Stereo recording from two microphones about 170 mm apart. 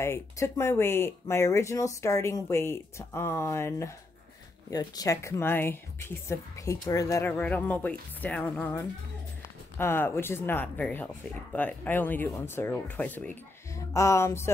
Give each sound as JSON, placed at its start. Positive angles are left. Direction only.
{"t": 0.0, "sound": "speech", "side_deg": 15}